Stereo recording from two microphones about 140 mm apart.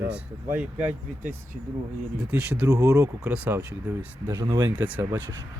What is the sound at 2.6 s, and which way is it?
Speech, 25° right (ahead or behind).